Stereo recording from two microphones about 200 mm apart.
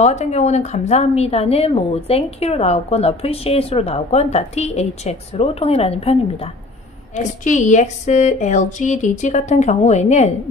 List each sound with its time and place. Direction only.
0.0 s a woman's voice: 35° left (ahead or behind)